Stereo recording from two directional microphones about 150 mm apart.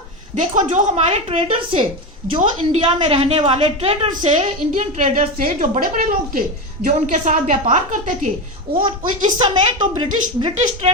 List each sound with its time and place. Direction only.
0.3 s a woman's voice: 55° right (ahead or behind)
4.9 s a woman's voice: 55° right (ahead or behind)
8.7 s a child's voice: 90° right
9.4 s a woman's voice: 35° right (ahead or behind)
10.8 s speech: 45° right (ahead or behind)